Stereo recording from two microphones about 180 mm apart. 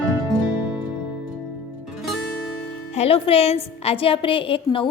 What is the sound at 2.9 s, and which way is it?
A woman's voice, 35° left (ahead or behind).